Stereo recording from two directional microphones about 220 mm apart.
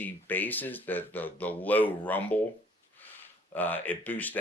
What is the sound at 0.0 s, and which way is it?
Speech, 10° left (ahead or behind).